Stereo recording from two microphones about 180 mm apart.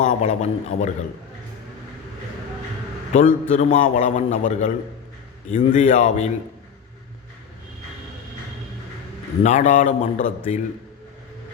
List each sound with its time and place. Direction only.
0.0 s a man's voice: 40° left (ahead or behind)
3.1 s a man's voice: 45° left (ahead or behind)
9.4 s a man's voice: 40° left (ahead or behind)